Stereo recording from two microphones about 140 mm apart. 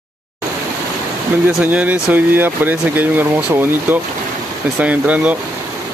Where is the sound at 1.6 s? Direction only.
10° right (ahead or behind).